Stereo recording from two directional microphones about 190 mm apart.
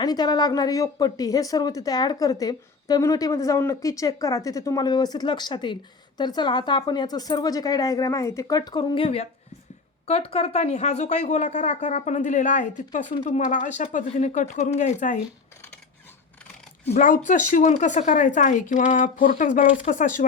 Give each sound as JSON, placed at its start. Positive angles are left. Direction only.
{"t": 0.0, "sound": "a woman's voice", "side_deg": 20}
{"t": 16.9, "sound": "speech", "side_deg": 45}